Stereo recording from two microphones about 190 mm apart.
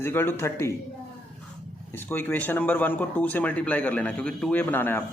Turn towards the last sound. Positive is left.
turn(degrees=10)  # may be behind; listen again after turning